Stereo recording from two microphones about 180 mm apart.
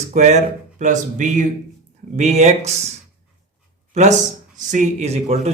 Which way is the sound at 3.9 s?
40° right (ahead or behind).